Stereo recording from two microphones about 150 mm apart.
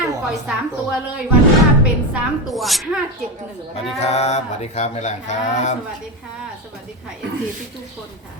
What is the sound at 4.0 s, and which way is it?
Speech, 45° left (ahead or behind).